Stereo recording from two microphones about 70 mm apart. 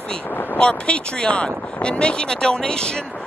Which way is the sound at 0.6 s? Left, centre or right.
Centre.